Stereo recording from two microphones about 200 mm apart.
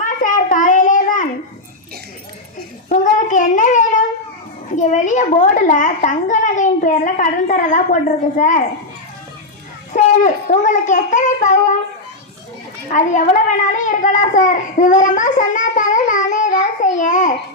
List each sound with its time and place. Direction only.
0.0 s child singing: 40° left (ahead or behind)
2.9 s a sound: 40° left (ahead or behind)
4.8 s a child's voice: 40° left (ahead or behind)
9.9 s a child's voice: 40° left (ahead or behind)
12.9 s a child's voice: 40° left (ahead or behind)